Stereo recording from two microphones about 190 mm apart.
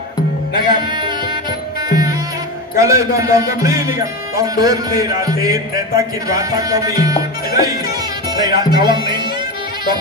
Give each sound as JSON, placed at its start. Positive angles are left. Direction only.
{"t": 0.6, "sound": "music", "side_deg": -25}
{"t": 2.8, "sound": "speech", "side_deg": -15}
{"t": 8.4, "sound": "speech", "side_deg": -20}